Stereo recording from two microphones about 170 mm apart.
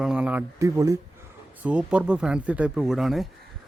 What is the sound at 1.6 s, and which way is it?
Speech, 10° right (ahead or behind).